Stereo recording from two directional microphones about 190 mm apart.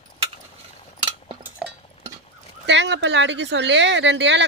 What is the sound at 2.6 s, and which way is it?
Speech, 70° right (ahead or behind).